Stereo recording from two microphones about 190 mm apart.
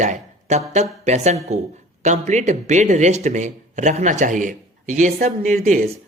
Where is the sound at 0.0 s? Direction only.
40° right (ahead or behind).